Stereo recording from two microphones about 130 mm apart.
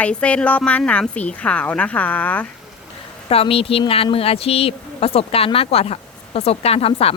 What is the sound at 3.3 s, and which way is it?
Speech, 45° left (ahead or behind).